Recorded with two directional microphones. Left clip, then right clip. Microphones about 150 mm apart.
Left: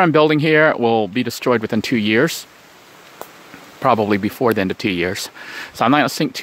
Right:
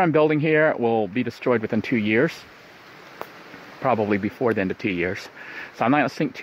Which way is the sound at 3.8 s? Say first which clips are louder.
Left 6 dB; 40° left (ahead or behind).